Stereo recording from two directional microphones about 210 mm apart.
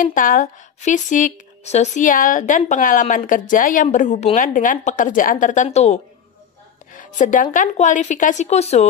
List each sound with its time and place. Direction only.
0.0 s speech: 40° left (ahead or behind)
6.9 s a sound: 40° left (ahead or behind)
7.5 s speech: 35° left (ahead or behind)